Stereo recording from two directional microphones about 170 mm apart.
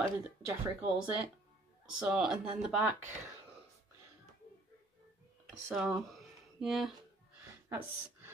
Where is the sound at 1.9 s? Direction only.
5° right (ahead or behind).